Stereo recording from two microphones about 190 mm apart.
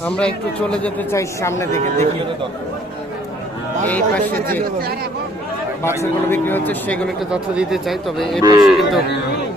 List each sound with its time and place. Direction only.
0.0 s speech: 5° left (ahead or behind)
1.7 s a man's voice: 40° right (ahead or behind)
3.8 s speech: 10° left (ahead or behind)
6.0 s speech: 10° left (ahead or behind)
7.3 s speech: 5° right (ahead or behind)
8.4 s a man's voice: 20° right (ahead or behind)
8.6 s speech: centre (ahead or behind)